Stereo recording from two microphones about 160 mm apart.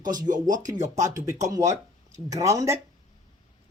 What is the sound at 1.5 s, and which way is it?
Speech, 20° right (ahead or behind).